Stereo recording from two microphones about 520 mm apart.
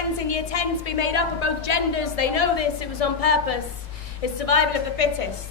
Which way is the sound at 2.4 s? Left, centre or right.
Left.